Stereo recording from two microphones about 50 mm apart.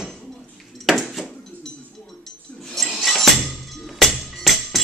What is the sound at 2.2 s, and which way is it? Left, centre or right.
Music, centre.